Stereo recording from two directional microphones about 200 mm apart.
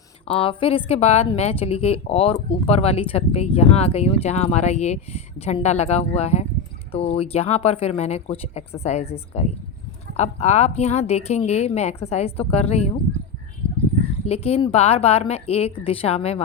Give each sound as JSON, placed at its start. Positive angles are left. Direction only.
{"t": 0.3, "sound": "a woman's voice", "side_deg": 25}
{"t": 10.2, "sound": "a woman's voice", "side_deg": 35}
{"t": 14.3, "sound": "a woman's voice", "side_deg": 30}